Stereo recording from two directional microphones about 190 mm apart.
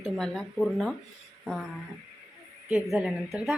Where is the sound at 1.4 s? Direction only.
Centre (ahead or behind).